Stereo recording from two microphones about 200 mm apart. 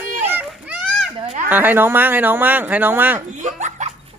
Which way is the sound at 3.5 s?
35° right (ahead or behind).